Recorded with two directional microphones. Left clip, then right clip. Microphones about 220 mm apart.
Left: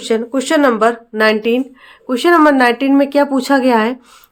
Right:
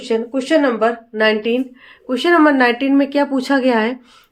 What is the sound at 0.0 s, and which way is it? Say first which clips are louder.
Speech: left 3 dB; 40° left (ahead or behind).